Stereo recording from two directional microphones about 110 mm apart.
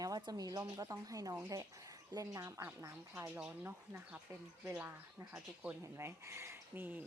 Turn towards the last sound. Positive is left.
turn(degrees=-20)  # may be behind; listen again after turning